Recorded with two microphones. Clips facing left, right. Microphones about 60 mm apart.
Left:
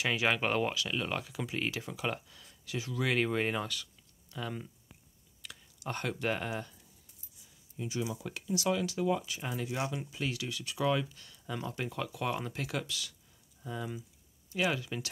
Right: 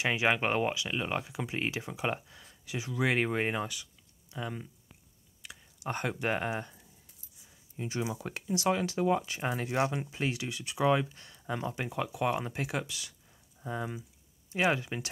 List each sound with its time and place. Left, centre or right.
0.0 s speech: right
7.7 s speech: right
11.7 s speech: centre